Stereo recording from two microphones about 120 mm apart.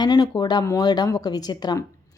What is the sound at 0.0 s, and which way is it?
Speech, 35° left (ahead or behind).